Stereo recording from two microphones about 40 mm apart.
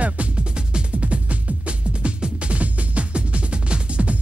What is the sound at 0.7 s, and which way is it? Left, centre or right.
Music, right.